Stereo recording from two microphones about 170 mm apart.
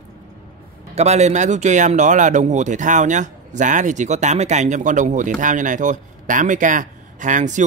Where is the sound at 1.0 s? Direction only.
40° right (ahead or behind).